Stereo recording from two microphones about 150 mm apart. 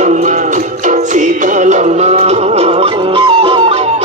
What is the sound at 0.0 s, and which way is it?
Music, 55° right (ahead or behind).